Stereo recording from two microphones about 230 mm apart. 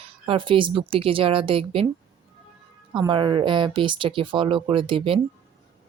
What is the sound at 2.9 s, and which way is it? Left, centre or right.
Speech, right.